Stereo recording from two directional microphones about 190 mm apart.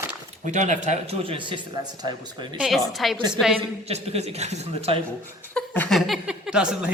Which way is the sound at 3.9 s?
35° right (ahead or behind).